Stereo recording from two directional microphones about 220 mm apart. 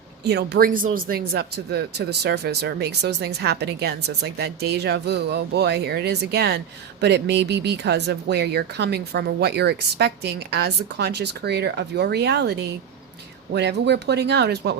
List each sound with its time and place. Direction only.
0.3 s speech: 50° right (ahead or behind)